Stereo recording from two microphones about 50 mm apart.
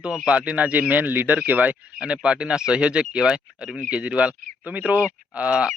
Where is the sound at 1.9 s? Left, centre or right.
Centre.